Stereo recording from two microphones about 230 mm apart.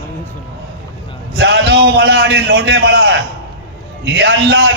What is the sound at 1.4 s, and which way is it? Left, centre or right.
A man's voice, right.